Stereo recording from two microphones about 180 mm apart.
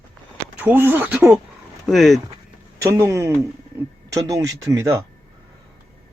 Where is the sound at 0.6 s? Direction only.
10° right (ahead or behind).